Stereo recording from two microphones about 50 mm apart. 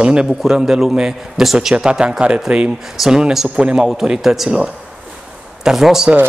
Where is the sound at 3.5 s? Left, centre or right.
Centre.